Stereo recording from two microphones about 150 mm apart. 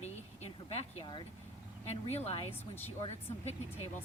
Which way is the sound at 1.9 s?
45° left (ahead or behind).